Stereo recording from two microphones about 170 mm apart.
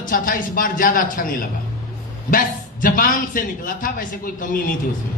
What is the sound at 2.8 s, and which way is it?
A man's voice, 55° left (ahead or behind).